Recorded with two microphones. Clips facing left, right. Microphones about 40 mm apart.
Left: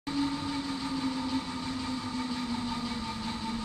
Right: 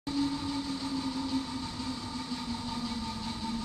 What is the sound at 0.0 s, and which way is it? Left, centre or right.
Train, centre.